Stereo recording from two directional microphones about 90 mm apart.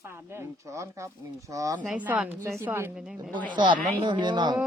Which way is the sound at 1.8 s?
15° right (ahead or behind).